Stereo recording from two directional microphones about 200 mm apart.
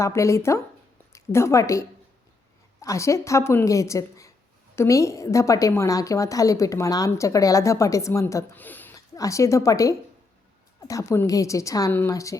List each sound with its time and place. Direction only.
0.0 s a woman's voice: 15° left (ahead or behind)
2.8 s a woman's voice: 15° left (ahead or behind)